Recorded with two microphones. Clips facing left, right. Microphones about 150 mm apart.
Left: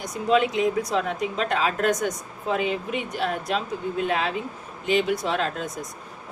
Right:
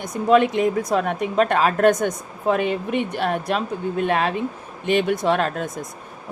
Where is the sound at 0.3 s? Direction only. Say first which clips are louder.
Right 4 dB; 55° right (ahead or behind).